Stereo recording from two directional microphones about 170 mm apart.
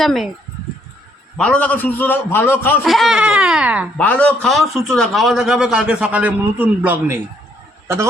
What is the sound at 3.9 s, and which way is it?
A man's voice, 10° left (ahead or behind).